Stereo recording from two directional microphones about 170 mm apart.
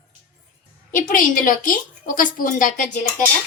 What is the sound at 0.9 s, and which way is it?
A woman's voice, 55° left (ahead or behind).